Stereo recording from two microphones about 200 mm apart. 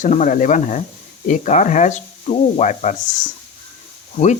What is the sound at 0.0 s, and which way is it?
Speech, 40° left (ahead or behind).